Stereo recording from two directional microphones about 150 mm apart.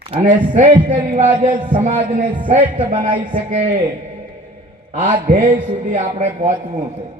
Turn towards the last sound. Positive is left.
turn(degrees=-45)  # may be behind; listen again after turning